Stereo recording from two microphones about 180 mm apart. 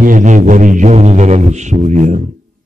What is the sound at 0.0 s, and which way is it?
Speech, 45° right (ahead or behind).